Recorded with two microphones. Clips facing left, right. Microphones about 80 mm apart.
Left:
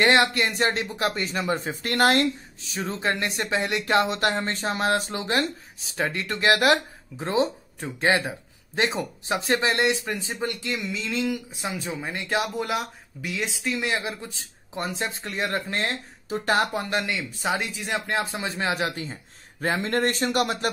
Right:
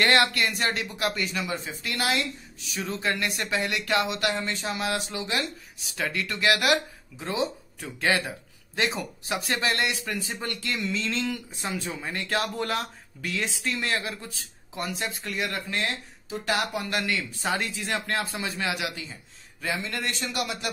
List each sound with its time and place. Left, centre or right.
0.0 s speech: left
2.6 s speech: left
16.9 s speech: left